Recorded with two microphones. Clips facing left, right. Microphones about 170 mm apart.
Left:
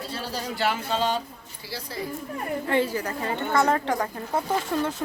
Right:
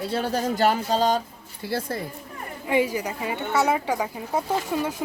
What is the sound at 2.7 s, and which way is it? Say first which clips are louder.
Speech: right 3 dB; 10° right (ahead or behind).